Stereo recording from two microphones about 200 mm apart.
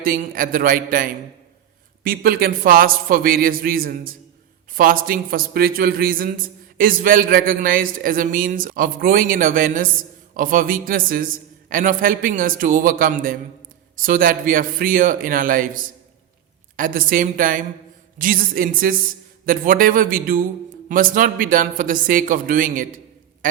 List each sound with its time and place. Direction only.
0.0 s a man's voice: 45° right (ahead or behind)